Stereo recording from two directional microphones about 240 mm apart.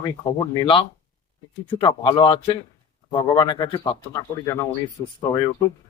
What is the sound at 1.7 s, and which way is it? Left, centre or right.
Speech, centre.